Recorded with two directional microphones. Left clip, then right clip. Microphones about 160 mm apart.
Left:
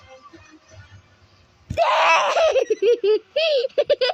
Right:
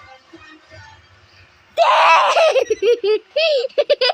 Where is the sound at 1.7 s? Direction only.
10° left (ahead or behind).